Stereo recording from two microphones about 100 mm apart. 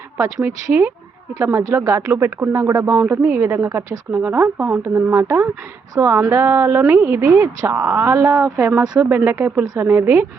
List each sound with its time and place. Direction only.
0.2 s speech: 25° right (ahead or behind)
3.5 s speech: 25° right (ahead or behind)
4.1 s speech: 15° right (ahead or behind)